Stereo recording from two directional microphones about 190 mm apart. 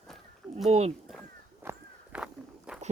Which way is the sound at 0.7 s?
35° right (ahead or behind).